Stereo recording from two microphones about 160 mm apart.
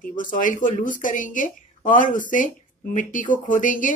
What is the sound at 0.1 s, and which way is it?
Speech, 55° left (ahead or behind).